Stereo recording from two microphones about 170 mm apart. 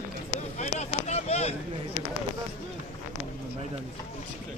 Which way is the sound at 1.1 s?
40° left (ahead or behind).